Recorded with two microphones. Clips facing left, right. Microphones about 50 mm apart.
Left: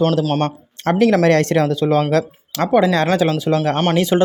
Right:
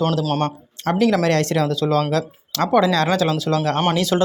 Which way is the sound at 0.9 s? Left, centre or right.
Left.